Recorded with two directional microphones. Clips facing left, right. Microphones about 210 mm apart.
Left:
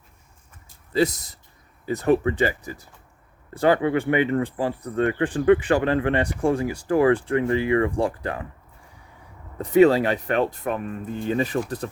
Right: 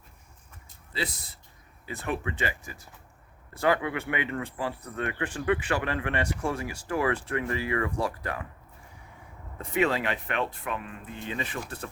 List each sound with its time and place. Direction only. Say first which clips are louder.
0.9 s speech: left 13 dB; 45° left (ahead or behind)
9.6 s speech: left 11 dB; 35° left (ahead or behind)